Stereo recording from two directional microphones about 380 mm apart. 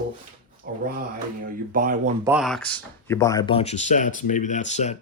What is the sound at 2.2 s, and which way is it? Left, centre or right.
Speech, centre.